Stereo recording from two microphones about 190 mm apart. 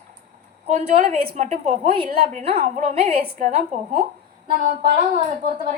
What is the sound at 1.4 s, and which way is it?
A woman's voice, 35° right (ahead or behind).